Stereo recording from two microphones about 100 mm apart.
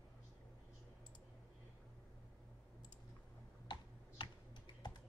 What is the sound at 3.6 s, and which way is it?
Computer keyboard, 50° left (ahead or behind).